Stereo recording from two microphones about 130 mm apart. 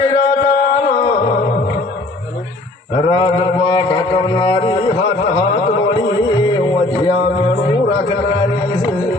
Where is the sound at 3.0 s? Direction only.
35° left (ahead or behind).